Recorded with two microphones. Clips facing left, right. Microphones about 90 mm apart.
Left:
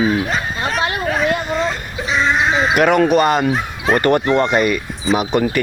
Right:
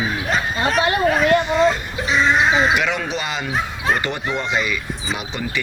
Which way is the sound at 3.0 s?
50° left (ahead or behind).